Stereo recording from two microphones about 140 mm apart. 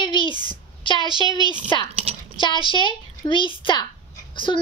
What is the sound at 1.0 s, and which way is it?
Speech, 30° right (ahead or behind).